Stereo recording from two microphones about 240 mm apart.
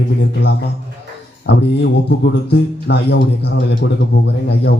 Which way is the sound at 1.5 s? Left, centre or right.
Left.